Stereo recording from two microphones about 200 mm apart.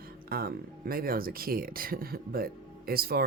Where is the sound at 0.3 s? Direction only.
50° right (ahead or behind).